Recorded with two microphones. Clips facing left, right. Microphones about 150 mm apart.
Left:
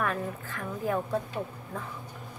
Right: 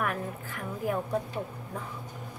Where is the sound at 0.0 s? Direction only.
15° right (ahead or behind).